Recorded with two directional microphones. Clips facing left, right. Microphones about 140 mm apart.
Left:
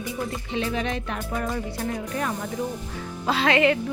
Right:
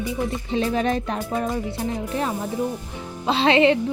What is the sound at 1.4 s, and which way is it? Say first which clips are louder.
A woman's voice: right 3 dB; 20° right (ahead or behind).